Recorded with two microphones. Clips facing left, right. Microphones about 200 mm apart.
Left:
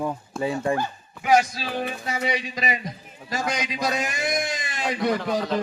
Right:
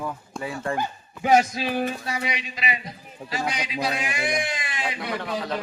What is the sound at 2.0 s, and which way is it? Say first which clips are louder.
Speech: left 3 dB; 25° left (ahead or behind).